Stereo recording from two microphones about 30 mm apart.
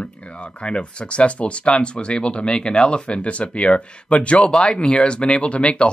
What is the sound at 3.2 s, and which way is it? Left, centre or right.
Speech, left.